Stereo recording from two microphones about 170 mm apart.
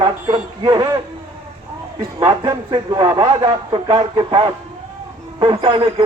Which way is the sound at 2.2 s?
30° right (ahead or behind).